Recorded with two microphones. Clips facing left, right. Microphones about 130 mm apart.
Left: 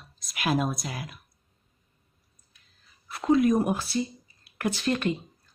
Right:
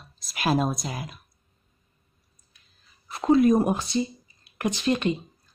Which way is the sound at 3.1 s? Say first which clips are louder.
Right 3 dB; 30° right (ahead or behind).